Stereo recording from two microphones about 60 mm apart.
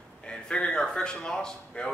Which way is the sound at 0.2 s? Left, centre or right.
Centre.